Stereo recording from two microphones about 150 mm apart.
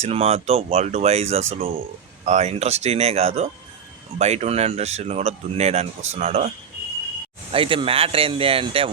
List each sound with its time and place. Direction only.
0.0 s speech: 45° right (ahead or behind)
7.5 s speech: 35° right (ahead or behind)